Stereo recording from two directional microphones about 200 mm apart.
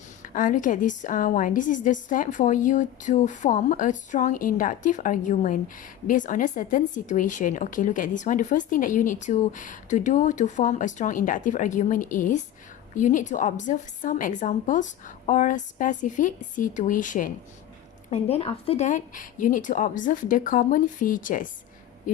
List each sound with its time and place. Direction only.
0.2 s a woman's voice: 40° left (ahead or behind)
18.1 s a woman's voice: 30° left (ahead or behind)